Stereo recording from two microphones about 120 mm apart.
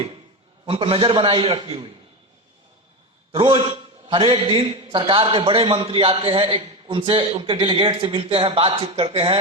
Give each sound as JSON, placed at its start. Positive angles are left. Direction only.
{"t": 0.6, "sound": "a man's voice", "side_deg": -50}
{"t": 3.3, "sound": "a man's voice", "side_deg": -50}